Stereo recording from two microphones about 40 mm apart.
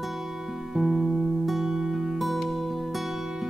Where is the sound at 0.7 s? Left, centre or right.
Centre.